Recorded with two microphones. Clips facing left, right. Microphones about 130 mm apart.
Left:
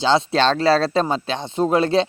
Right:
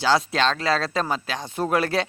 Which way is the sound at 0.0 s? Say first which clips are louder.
Left 4 dB; 25° left (ahead or behind).